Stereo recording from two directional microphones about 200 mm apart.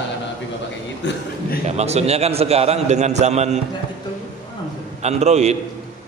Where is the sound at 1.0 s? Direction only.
65° left (ahead or behind).